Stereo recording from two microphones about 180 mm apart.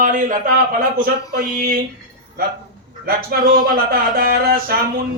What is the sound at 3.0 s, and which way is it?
Speech, 55° right (ahead or behind).